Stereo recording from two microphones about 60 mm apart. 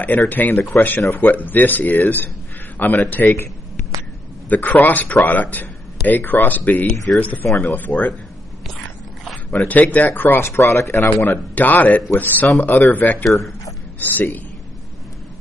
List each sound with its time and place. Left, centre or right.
0.0 s speech: left
4.5 s speech: left
9.7 s speech: left
11.2 s speech: left